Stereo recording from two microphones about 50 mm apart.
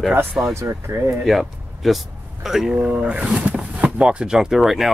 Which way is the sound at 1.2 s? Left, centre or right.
Centre.